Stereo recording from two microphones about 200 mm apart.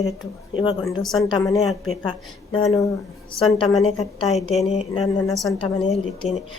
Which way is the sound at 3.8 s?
30° left (ahead or behind).